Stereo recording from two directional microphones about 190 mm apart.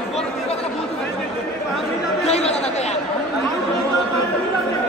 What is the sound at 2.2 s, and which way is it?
Chatter, 35° left (ahead or behind).